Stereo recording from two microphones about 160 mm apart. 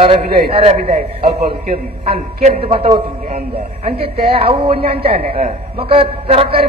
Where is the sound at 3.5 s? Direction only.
75° right (ahead or behind).